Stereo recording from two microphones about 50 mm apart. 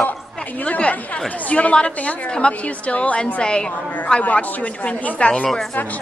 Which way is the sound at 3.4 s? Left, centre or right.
Centre.